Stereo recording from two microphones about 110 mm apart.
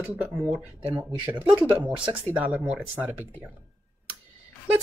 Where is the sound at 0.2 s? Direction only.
15° right (ahead or behind).